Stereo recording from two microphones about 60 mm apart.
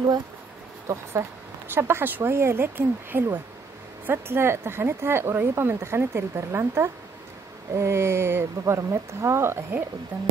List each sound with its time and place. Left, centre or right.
0.9 s speech: right
1.7 s speech: right
8.7 s speech: right
10.1 s speech: right